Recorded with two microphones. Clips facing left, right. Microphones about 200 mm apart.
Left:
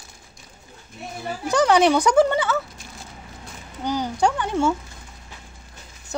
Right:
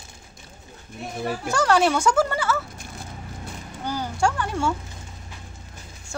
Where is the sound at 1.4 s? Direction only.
20° left (ahead or behind).